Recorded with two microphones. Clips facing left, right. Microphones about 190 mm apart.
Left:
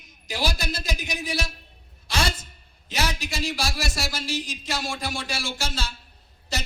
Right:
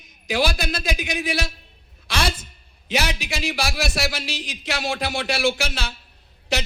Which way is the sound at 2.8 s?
70° right (ahead or behind).